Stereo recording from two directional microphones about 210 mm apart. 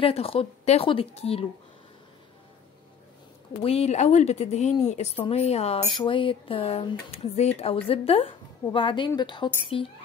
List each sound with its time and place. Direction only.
0.0 s a woman's voice: 25° left (ahead or behind)
3.6 s a woman's voice: 30° left (ahead or behind)